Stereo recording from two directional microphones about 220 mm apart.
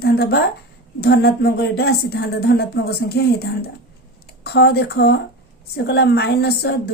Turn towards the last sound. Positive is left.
turn(degrees=50)  # may be behind; listen again after turning